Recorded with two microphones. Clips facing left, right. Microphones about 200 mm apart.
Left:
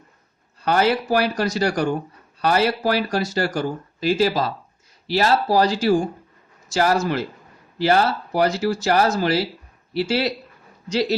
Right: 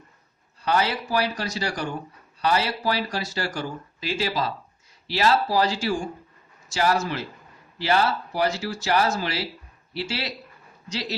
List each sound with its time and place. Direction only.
0.6 s speech: 50° left (ahead or behind)